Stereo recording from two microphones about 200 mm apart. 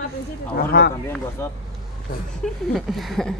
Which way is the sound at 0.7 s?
50° left (ahead or behind).